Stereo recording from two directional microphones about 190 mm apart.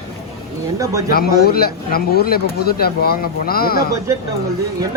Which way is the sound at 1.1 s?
50° left (ahead or behind).